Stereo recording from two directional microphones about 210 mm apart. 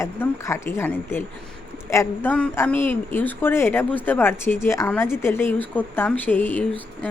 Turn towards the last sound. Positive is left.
turn(degrees=10)  # may be behind; listen again after turning